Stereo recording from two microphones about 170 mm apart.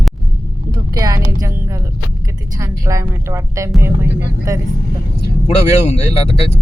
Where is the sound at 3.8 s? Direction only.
15° right (ahead or behind).